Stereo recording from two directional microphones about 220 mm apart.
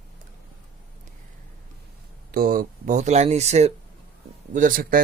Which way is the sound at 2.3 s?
40° right (ahead or behind).